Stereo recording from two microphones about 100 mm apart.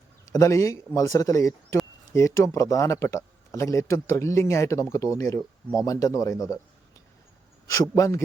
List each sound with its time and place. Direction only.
0.3 s speech: 30° left (ahead or behind)
7.7 s speech: 35° left (ahead or behind)